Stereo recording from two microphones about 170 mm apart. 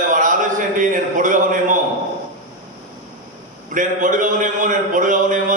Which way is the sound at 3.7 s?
50° right (ahead or behind).